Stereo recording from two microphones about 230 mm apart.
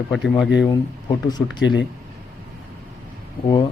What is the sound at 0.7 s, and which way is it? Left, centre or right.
Speech, centre.